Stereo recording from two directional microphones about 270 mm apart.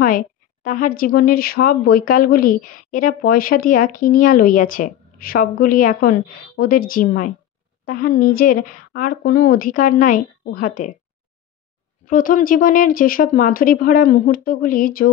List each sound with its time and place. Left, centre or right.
0.0 s a woman's voice: left
12.1 s a woman's voice: left